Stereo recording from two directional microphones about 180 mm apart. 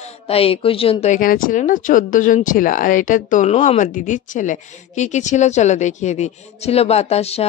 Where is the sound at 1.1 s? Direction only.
50° left (ahead or behind).